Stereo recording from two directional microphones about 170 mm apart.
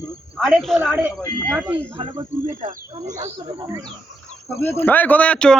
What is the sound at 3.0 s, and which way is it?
Speech, 45° right (ahead or behind).